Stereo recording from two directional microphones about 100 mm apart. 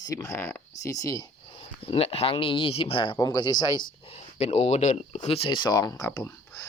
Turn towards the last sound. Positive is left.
turn(degrees=35)  # may be behind; listen again after turning